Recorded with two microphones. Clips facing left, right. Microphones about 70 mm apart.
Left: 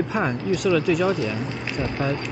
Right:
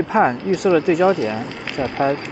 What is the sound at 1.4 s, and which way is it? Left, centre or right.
Speech, right.